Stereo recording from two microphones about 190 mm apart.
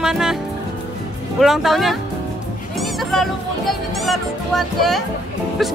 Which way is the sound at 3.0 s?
Centre (ahead or behind).